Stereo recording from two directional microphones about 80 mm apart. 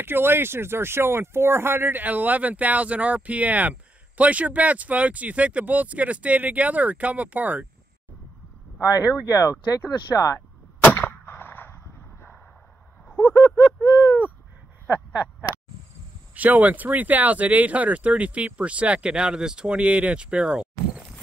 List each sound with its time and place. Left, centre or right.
0.0 s speech: right
9.2 s speech: left
10.8 s cap gun: centre
13.1 s a sound: centre
16.3 s speech: centre